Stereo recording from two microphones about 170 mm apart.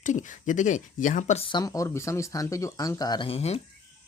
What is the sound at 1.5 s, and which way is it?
Speech, 25° left (ahead or behind).